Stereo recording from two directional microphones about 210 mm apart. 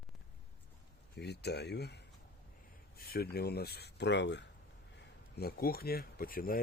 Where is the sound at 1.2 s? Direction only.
50° left (ahead or behind).